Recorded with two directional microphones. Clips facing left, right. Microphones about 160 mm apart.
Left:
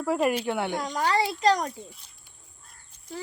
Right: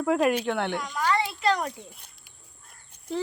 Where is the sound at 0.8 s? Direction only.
35° left (ahead or behind).